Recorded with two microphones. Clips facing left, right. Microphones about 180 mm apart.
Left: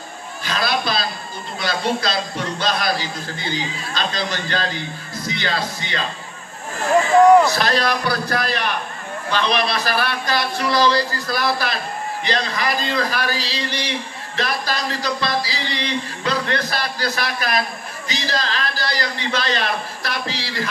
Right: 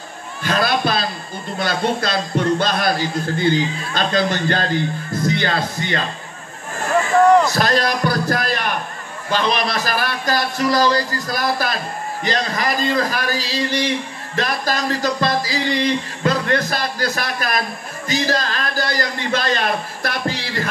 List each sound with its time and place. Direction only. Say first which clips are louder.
0.4 s a sound: right 4 dB; 50° right (ahead or behind)
1.6 s a man's voice: right 2 dB; 50° right (ahead or behind)
7.5 s a man's voice: right 2 dB; 45° right (ahead or behind)